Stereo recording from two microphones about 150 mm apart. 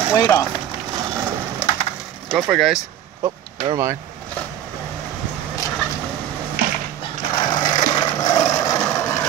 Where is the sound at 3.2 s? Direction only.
20° right (ahead or behind).